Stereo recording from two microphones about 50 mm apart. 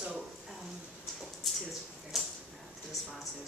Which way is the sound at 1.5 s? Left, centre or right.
Centre.